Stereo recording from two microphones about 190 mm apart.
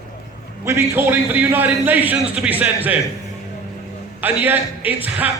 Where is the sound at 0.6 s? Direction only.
15° right (ahead or behind).